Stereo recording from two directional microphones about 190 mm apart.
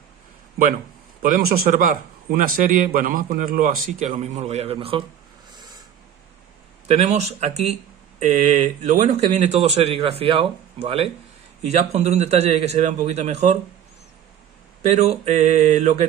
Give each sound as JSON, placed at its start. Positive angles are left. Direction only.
{"t": 1.2, "sound": "a man's voice", "side_deg": -50}
{"t": 5.5, "sound": "a sound", "side_deg": -20}
{"t": 6.9, "sound": "speech", "side_deg": -35}
{"t": 14.9, "sound": "speech", "side_deg": -35}